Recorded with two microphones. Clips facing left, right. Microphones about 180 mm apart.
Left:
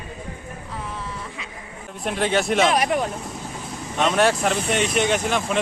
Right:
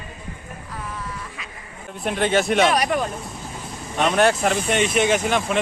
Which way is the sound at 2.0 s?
Centre (ahead or behind).